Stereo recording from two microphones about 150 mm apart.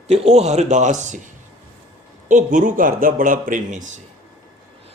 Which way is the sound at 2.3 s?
60° right (ahead or behind).